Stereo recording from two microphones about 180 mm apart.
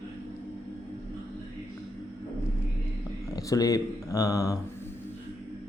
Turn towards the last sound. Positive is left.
turn(degrees=20)  # may be behind; listen again after turning